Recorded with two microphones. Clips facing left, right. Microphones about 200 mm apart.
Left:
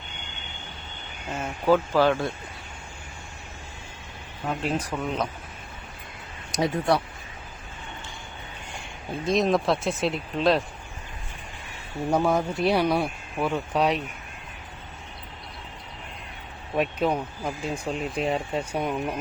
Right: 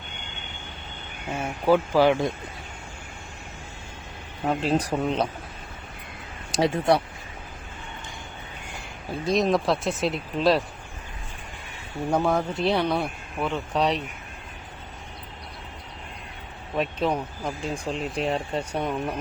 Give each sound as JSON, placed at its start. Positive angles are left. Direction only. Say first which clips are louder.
{"t": 1.3, "sound": "speech", "louder": "right 1 dB", "side_deg": -10}
{"t": 4.4, "sound": "speech", "louder": "right 4 dB", "side_deg": -35}
{"t": 6.5, "sound": "speech", "louder": "right 2 dB", "side_deg": -25}
{"t": 9.2, "sound": "speech", "louder": "even", "side_deg": 0}
{"t": 12.1, "sound": "speech", "louder": "even", "side_deg": 5}
{"t": 16.7, "sound": "speech", "louder": "left 1 dB", "side_deg": 10}